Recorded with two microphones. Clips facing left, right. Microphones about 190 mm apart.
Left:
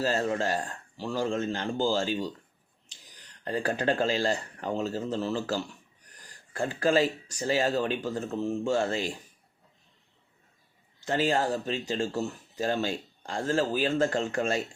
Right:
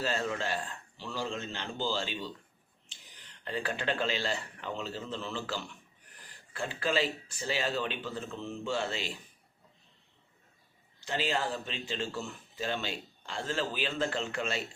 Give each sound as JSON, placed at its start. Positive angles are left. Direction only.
{"t": 0.0, "sound": "speech", "side_deg": 40}
{"t": 11.0, "sound": "speech", "side_deg": 45}